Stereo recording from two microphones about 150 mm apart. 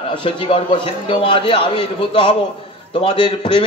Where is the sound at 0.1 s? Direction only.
35° left (ahead or behind).